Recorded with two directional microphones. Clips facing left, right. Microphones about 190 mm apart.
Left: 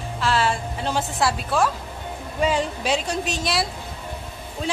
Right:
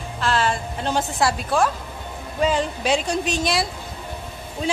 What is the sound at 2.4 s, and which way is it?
A woman's voice, 5° left (ahead or behind).